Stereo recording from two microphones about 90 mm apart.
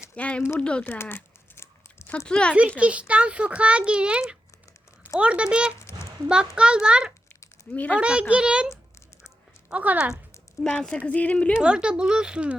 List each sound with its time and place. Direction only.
0.2 s speech: 15° left (ahead or behind)
0.9 s a sound: 25° left (ahead or behind)
2.2 s speech: 10° left (ahead or behind)
2.6 s a child's voice: 15° right (ahead or behind)
7.7 s speech: 15° left (ahead or behind)
7.9 s a child's voice: 10° right (ahead or behind)
10.6 s speech: 10° left (ahead or behind)
11.5 s a child's voice: 10° right (ahead or behind)